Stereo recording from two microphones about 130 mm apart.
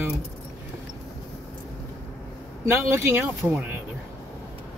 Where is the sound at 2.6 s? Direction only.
20° right (ahead or behind).